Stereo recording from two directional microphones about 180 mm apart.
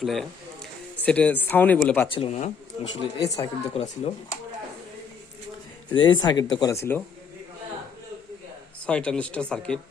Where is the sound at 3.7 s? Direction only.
40° left (ahead or behind).